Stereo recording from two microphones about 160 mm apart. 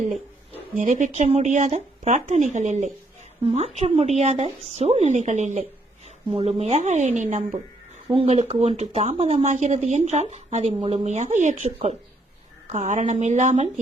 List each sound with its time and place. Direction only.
0.8 s speech: 50° right (ahead or behind)
8.0 s speech: 35° right (ahead or behind)